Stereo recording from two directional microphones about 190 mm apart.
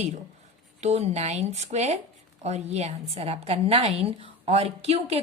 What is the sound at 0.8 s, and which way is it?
A woman's voice, 35° right (ahead or behind).